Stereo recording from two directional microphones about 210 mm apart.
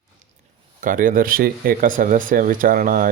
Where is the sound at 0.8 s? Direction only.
40° right (ahead or behind).